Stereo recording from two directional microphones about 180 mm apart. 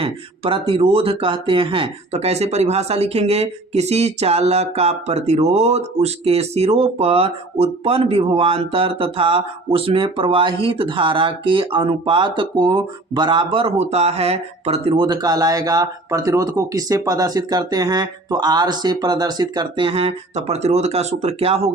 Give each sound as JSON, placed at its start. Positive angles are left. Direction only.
{"t": 0.0, "sound": "speech", "side_deg": -30}